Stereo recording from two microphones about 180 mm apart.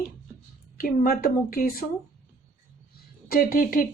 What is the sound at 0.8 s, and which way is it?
Speech, 50° left (ahead or behind).